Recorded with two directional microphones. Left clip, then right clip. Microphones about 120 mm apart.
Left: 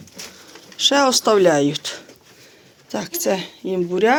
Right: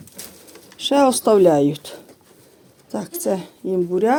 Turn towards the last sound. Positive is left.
turn(degrees=-30)  # may be behind; listen again after turning